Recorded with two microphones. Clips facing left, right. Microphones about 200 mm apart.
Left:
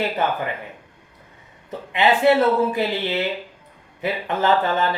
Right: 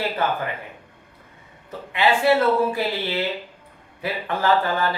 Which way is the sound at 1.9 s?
20° left (ahead or behind).